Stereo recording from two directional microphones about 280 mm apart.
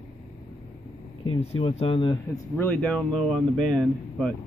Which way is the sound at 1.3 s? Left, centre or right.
Centre.